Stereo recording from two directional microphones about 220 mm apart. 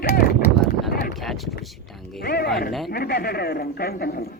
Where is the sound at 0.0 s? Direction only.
45° left (ahead or behind).